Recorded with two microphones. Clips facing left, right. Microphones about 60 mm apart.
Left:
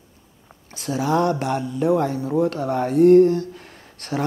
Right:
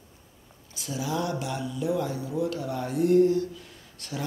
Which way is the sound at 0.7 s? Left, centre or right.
Left.